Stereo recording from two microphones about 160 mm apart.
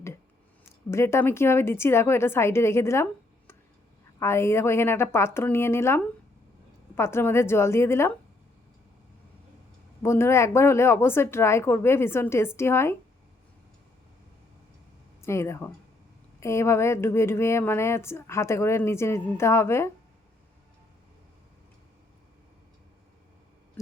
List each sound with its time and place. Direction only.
0.9 s a woman's voice: 15° left (ahead or behind)
10.0 s a woman's voice: 15° left (ahead or behind)
15.2 s a woman's voice: 15° left (ahead or behind)